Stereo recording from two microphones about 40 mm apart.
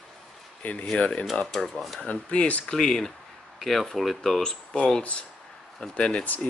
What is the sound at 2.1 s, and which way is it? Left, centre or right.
Speech, left.